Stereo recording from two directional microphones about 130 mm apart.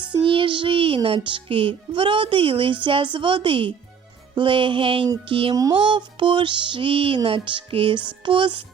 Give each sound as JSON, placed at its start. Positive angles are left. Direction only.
{"t": 0.1, "sound": "music", "side_deg": -40}
{"t": 5.5, "sound": "speech", "side_deg": -25}
{"t": 5.8, "sound": "music", "side_deg": -40}